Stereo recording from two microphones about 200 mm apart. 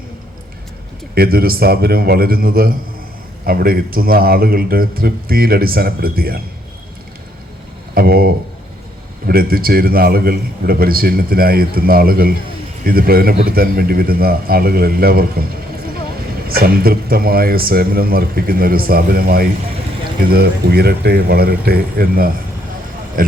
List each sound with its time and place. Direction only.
1.1 s a man's voice: 50° right (ahead or behind)
7.9 s a man's voice: 50° right (ahead or behind)
16.5 s a man's voice: 50° right (ahead or behind)